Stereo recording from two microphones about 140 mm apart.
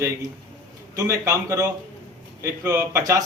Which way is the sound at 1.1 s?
20° right (ahead or behind).